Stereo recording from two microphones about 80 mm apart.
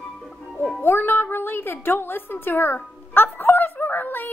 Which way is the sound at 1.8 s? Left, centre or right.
Left.